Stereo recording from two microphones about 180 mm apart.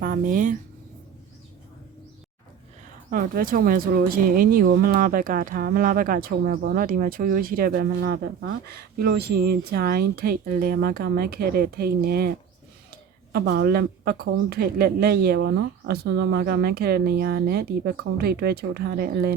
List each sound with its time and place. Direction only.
0.0 s speech: 50° right (ahead or behind)
3.1 s speech: 50° right (ahead or behind)
13.3 s speech: 65° right (ahead or behind)